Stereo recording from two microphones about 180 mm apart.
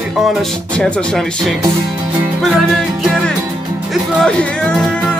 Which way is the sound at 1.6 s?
25° right (ahead or behind).